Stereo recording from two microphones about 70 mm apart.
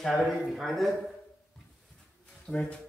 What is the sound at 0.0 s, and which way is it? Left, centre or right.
Speech, centre.